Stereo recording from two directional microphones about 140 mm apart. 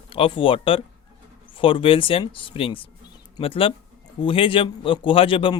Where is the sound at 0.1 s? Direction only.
40° left (ahead or behind).